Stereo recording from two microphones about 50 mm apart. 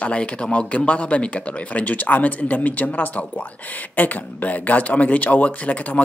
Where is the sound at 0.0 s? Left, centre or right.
Left.